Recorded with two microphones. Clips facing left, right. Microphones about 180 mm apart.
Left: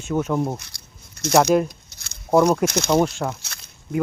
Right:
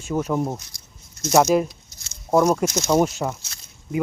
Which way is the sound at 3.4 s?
65° left (ahead or behind).